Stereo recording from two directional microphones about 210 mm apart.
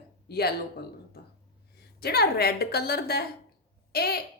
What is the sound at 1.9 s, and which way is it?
A woman's voice, 50° left (ahead or behind).